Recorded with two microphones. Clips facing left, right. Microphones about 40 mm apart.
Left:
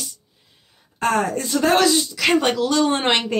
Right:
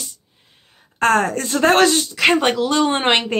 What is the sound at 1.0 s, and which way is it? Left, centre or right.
A woman's voice, right.